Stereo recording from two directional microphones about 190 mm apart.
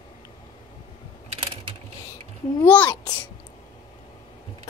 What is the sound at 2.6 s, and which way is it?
Babbling, 10° left (ahead or behind).